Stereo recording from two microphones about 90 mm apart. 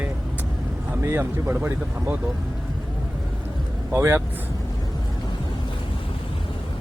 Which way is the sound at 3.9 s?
25° right (ahead or behind).